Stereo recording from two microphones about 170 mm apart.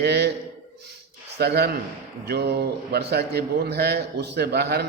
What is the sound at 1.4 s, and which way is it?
A man's voice, 70° right (ahead or behind).